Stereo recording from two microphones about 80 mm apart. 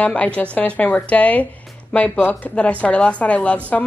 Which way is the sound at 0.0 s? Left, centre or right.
Centre.